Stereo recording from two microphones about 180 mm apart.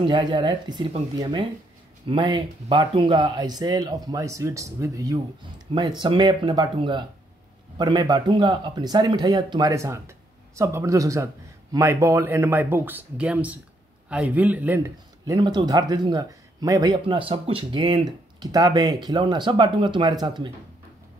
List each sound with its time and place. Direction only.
0.0 s speech: 25° right (ahead or behind)
15.3 s speech: 25° right (ahead or behind)